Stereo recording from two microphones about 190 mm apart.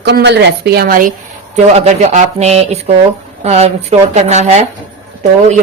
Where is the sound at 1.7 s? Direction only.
35° right (ahead or behind).